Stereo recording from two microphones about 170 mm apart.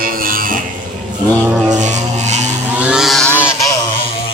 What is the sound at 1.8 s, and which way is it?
Music, 45° right (ahead or behind).